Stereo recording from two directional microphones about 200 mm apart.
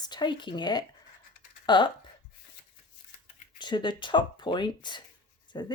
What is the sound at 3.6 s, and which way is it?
Speech, 25° left (ahead or behind).